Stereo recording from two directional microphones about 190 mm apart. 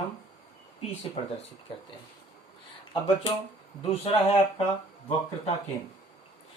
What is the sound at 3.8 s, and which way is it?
Speech, 35° left (ahead or behind).